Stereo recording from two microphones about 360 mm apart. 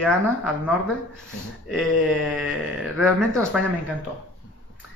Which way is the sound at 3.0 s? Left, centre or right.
Centre.